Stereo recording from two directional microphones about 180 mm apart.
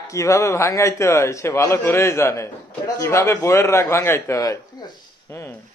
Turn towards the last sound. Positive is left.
turn(degrees=15)  # may be behind; listen again after turning